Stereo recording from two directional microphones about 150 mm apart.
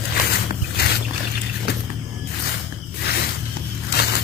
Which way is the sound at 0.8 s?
90° left.